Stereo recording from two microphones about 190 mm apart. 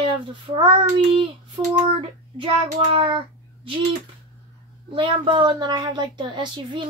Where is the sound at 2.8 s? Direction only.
25° right (ahead or behind).